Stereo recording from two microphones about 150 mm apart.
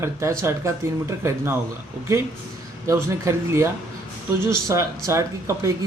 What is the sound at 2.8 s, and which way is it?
Speech, 20° right (ahead or behind).